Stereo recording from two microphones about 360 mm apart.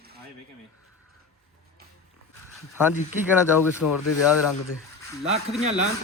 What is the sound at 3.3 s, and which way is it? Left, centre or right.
Speech, centre.